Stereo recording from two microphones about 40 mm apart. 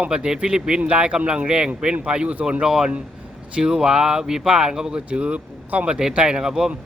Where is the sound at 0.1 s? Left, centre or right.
Right.